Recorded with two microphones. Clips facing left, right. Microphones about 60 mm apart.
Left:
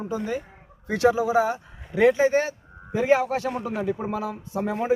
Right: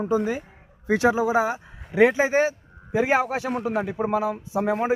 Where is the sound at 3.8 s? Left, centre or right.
Right.